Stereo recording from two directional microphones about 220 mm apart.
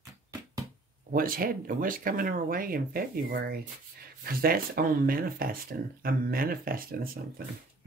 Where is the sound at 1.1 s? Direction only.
40° right (ahead or behind).